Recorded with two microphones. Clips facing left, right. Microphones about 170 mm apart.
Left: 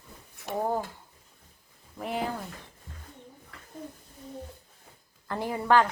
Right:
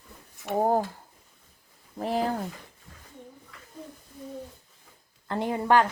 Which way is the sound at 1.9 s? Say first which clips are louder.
Right 5 dB; 35° right (ahead or behind).